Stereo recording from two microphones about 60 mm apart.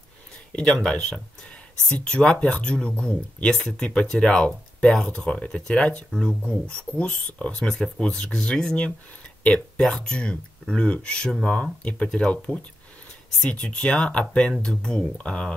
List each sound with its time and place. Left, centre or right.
0.5 s speech: centre